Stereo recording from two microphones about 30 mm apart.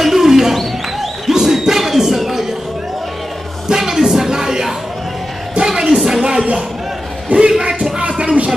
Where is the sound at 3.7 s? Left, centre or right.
Centre.